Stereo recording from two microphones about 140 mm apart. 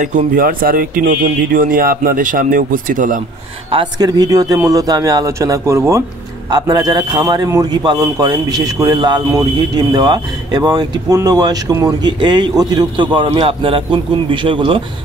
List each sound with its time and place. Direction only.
0.4 s speech: 90° right; by 3.2 s 70° right (ahead or behind)
3.7 s a man's voice: 30° right (ahead or behind)